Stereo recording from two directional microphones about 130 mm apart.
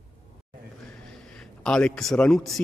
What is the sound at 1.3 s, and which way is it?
A man's voice, 5° left (ahead or behind).